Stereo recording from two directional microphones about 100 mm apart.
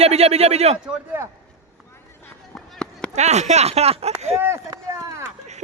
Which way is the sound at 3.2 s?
90° right.